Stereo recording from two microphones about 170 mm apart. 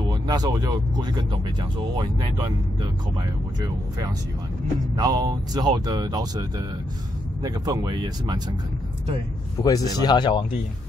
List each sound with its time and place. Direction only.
0.1 s speech: 25° right (ahead or behind)
4.9 s speech: 25° right (ahead or behind)
7.4 s speech: 20° right (ahead or behind)
9.6 s speech: 20° left (ahead or behind)